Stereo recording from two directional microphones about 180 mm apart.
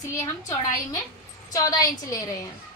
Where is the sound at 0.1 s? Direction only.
15° left (ahead or behind).